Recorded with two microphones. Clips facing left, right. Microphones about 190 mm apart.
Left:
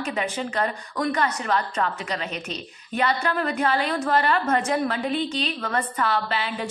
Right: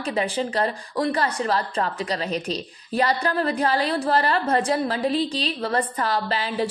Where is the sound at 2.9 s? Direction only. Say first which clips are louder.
Right 2 dB; 35° right (ahead or behind).